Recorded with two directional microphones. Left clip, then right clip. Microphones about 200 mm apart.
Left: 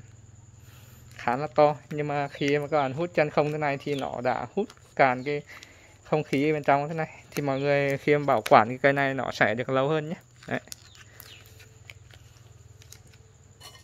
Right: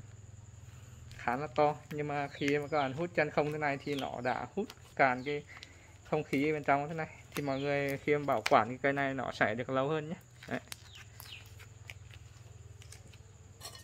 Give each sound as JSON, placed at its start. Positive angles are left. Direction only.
{"t": 1.1, "sound": "speech", "side_deg": 55}